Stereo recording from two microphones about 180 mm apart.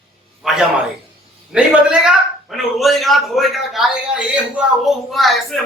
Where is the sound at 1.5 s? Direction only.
5° right (ahead or behind).